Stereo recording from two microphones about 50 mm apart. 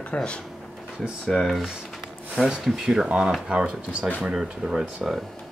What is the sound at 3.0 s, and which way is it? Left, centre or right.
Speech, centre.